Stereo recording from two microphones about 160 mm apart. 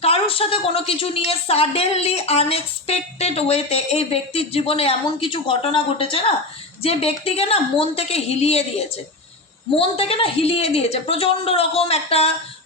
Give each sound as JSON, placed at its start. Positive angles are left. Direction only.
{"t": 0.0, "sound": "a woman's voice", "side_deg": 35}